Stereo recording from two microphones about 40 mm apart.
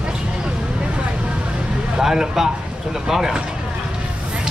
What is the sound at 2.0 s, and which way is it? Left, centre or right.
A man's voice, centre.